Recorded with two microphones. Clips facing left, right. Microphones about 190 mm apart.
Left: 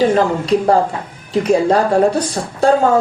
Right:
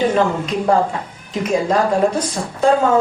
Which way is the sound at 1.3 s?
35° left (ahead or behind).